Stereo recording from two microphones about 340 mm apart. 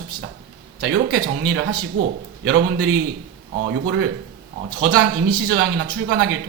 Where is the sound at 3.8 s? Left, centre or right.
Right.